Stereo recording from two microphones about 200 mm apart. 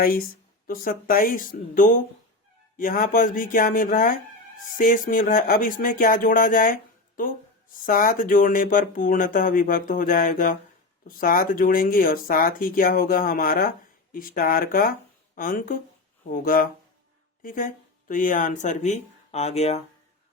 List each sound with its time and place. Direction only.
0.0 s speech: 45° left (ahead or behind)